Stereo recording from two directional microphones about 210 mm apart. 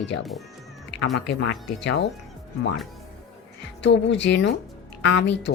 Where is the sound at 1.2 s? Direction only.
55° left (ahead or behind).